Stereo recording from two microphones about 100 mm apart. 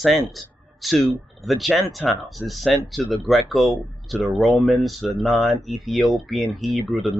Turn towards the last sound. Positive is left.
turn(degrees=0)  # may be behind; listen again after turning